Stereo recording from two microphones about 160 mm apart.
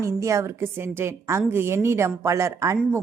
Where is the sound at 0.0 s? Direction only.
20° right (ahead or behind).